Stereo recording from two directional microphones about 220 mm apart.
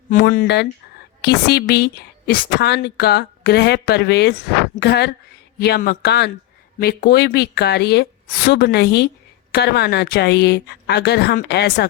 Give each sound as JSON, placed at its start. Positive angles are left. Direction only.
{"t": 0.1, "sound": "a woman's voice", "side_deg": 40}